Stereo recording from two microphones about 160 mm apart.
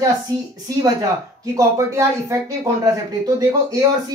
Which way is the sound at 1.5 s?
20° right (ahead or behind).